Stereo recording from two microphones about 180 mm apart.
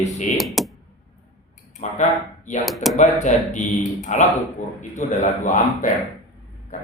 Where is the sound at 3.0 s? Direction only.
40° left (ahead or behind).